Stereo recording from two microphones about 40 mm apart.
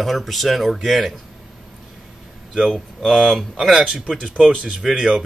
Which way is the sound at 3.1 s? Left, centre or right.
Centre.